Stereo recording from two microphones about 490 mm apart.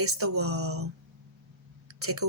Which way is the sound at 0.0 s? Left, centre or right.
Right.